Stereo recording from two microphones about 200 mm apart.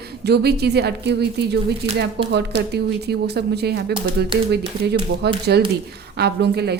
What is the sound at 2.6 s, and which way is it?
Speech, 55° right (ahead or behind).